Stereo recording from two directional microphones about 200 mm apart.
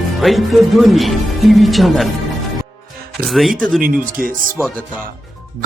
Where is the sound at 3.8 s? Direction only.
45° right (ahead or behind).